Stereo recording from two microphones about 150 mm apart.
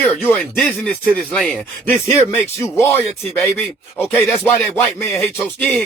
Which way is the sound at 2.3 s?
15° left (ahead or behind).